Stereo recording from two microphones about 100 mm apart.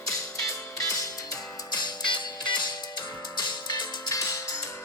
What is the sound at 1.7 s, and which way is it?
Music, 45° left (ahead or behind).